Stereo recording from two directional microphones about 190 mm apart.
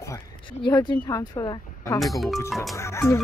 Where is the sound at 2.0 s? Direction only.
Centre (ahead or behind).